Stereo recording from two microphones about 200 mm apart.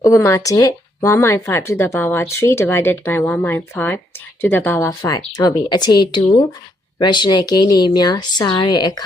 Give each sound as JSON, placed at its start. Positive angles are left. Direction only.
{"t": 0.0, "sound": "speech", "side_deg": 15}